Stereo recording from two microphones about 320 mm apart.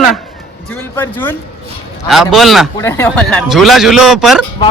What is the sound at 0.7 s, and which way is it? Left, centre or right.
A man's voice, centre.